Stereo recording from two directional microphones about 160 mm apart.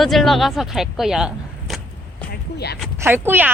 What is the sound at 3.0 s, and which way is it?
Speech, 15° right (ahead or behind).